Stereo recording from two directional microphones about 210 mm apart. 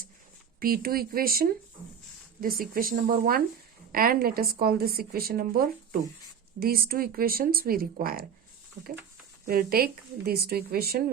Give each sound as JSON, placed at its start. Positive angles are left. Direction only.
{"t": 0.6, "sound": "a woman's voice", "side_deg": -45}
{"t": 9.5, "sound": "a woman's voice", "side_deg": -45}